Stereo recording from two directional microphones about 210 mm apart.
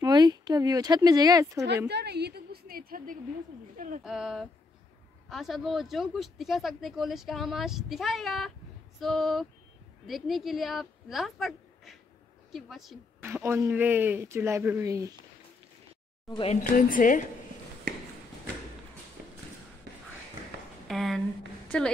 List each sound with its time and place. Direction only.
0.0 s speech: 20° right (ahead or behind)
1.9 s a sound: 50° right (ahead or behind)
3.7 s bird: 40° right (ahead or behind)
4.0 s a woman's voice: centre (ahead or behind)
13.3 s speech: 10° right (ahead or behind)
16.3 s speech: 25° left (ahead or behind)
16.7 s a woman's voice: 40° left (ahead or behind)
20.9 s a woman's voice: centre (ahead or behind)